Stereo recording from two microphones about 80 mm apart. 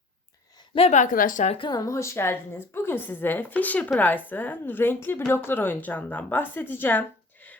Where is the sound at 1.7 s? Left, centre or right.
Left.